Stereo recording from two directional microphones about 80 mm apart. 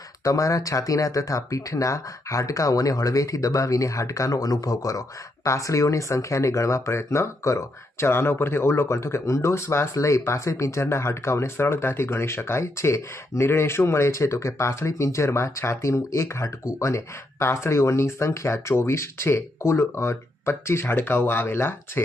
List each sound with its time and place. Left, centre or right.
0.3 s speech: left